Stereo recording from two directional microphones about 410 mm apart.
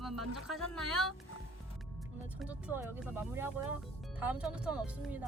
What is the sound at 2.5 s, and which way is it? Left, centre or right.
Speech, centre.